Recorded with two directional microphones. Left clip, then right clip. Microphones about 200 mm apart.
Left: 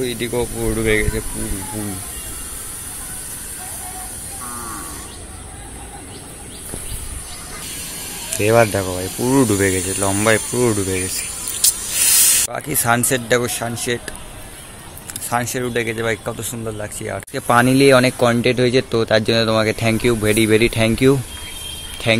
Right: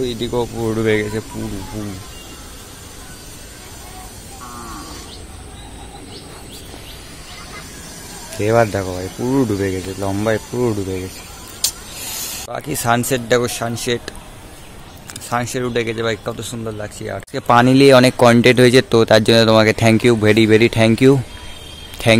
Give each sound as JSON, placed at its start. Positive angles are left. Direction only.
{"t": 0.0, "sound": "speech", "side_deg": -15}
{"t": 8.4, "sound": "speech", "side_deg": 0}
{"t": 11.6, "sound": "hiss", "side_deg": -5}
{"t": 12.4, "sound": "speech", "side_deg": -5}
{"t": 15.2, "sound": "speech", "side_deg": -10}